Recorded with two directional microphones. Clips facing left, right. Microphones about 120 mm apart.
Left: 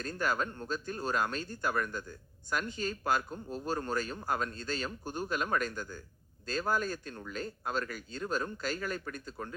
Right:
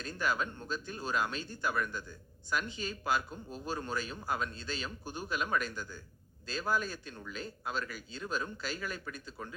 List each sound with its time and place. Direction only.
0.0 s speech: 45° left (ahead or behind)